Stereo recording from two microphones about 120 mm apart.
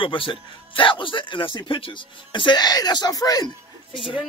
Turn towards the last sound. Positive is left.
turn(degrees=35)  # may be behind; listen again after turning